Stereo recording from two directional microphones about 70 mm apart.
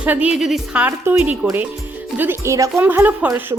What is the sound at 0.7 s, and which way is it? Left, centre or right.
Speech, right.